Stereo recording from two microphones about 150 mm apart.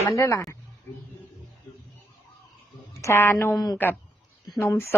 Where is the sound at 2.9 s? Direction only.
20° left (ahead or behind).